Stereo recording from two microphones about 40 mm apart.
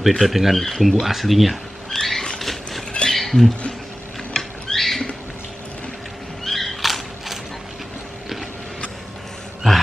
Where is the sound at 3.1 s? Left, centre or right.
Centre.